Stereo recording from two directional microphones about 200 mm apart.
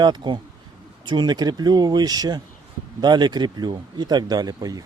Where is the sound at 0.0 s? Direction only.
20° right (ahead or behind).